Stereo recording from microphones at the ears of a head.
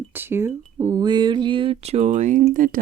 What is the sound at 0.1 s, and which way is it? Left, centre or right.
Speech, right.